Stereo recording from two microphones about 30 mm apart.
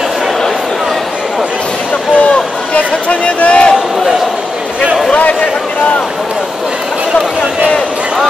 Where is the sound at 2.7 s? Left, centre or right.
Left.